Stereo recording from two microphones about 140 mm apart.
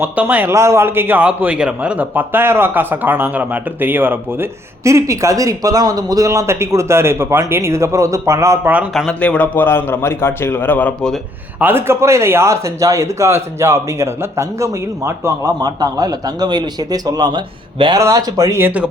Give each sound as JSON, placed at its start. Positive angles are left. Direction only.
{"t": 0.0, "sound": "a man's voice", "side_deg": -10}
{"t": 8.9, "sound": "a man's voice", "side_deg": 5}
{"t": 11.6, "sound": "a man's voice", "side_deg": -15}